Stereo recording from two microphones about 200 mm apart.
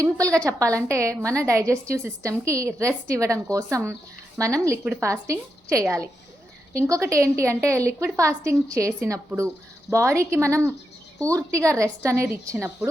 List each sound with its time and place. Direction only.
0.0 s a woman's voice: 15° right (ahead or behind)